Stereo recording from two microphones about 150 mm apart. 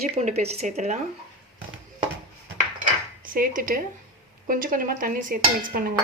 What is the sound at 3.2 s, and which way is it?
Dishes, 65° right (ahead or behind).